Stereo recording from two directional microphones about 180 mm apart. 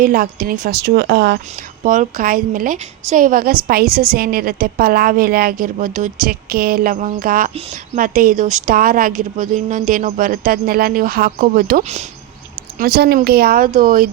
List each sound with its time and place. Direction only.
0.0 s speech: 55° right (ahead or behind)
1.8 s a woman's voice: 45° right (ahead or behind)
12.8 s a woman's voice: 60° right (ahead or behind)